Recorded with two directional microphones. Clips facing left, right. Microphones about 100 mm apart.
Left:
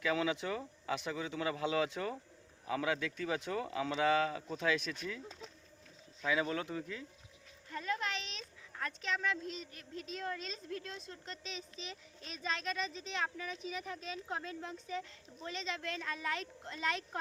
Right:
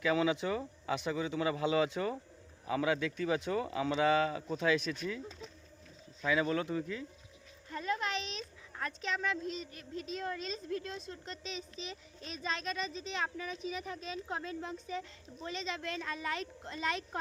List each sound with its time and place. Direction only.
0.0 s speech: 10° right (ahead or behind)
6.2 s a child's voice: 5° left (ahead or behind)
7.7 s a child's voice: 25° right (ahead or behind)
9.0 s speech: 10° right (ahead or behind)
11.4 s a child's voice: 5° right (ahead or behind)